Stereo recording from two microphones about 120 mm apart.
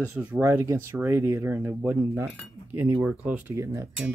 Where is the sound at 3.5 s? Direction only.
25° right (ahead or behind).